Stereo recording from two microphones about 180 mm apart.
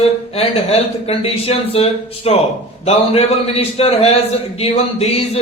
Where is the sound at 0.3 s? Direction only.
35° left (ahead or behind).